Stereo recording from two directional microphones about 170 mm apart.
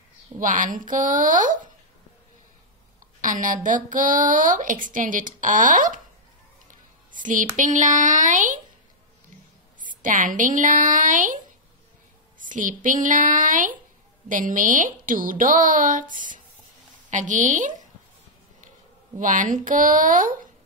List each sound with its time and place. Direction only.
0.4 s a woman's voice: 50° right (ahead or behind)
3.2 s a woman's voice: 50° right (ahead or behind)
6.7 s a sound: 50° right (ahead or behind)
7.5 s a woman's voice: 50° right (ahead or behind)
9.8 s a woman's voice: 50° right (ahead or behind)
12.4 s a woman's voice: 50° right (ahead or behind)
19.1 s a woman's voice: 50° right (ahead or behind)